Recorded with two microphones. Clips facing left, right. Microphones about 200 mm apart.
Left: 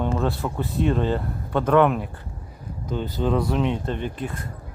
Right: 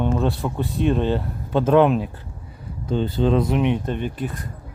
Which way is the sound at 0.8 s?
20° right (ahead or behind).